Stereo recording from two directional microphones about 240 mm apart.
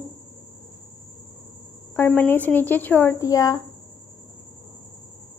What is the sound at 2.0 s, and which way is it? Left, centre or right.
Speech, centre.